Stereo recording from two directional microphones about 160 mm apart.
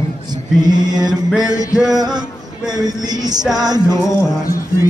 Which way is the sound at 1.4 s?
20° left (ahead or behind).